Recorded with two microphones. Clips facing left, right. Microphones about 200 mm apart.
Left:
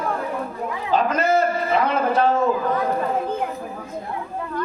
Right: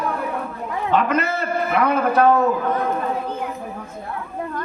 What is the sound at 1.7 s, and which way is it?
Speech, 60° right (ahead or behind).